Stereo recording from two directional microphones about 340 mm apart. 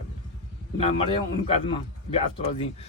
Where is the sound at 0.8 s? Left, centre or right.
Centre.